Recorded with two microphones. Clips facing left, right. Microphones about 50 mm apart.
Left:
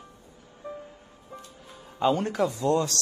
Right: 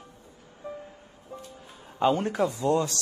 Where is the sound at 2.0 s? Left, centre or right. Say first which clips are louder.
Even; centre.